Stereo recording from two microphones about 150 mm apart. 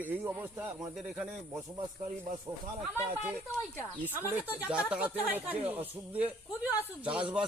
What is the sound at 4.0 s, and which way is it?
Speech, 15° right (ahead or behind).